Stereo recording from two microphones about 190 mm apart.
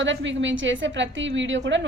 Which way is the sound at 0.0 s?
75° right (ahead or behind).